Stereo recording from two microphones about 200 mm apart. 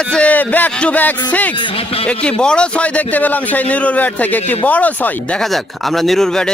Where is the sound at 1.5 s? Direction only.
25° left (ahead or behind).